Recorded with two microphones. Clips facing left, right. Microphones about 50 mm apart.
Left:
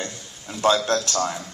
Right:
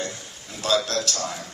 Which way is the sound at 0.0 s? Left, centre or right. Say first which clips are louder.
Right 1 dB; left.